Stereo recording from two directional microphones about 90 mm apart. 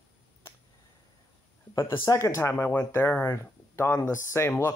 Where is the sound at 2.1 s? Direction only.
35° left (ahead or behind).